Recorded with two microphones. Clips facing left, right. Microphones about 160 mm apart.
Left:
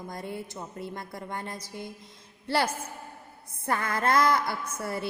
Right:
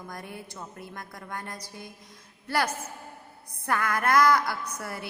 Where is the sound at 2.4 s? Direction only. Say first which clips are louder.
Left 1 dB; 25° left (ahead or behind).